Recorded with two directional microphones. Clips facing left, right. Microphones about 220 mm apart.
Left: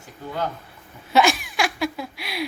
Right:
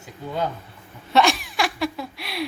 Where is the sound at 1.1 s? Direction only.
Centre (ahead or behind).